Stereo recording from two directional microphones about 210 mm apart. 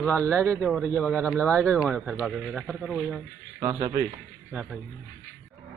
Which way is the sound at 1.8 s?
5° right (ahead or behind).